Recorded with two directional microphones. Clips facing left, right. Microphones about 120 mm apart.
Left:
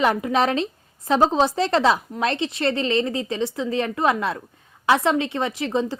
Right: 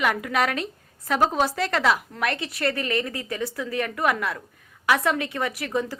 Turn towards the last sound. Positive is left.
turn(degrees=25)  # may be behind; listen again after turning